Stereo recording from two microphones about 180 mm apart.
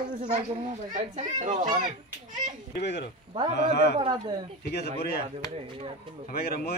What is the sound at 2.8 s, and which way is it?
A man's voice, 70° left (ahead or behind).